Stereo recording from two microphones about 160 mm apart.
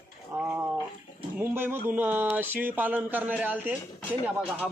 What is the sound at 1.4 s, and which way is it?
A man's voice, 15° right (ahead or behind).